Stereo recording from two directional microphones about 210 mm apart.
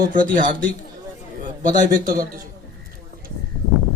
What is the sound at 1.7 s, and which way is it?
Speech, 40° right (ahead or behind).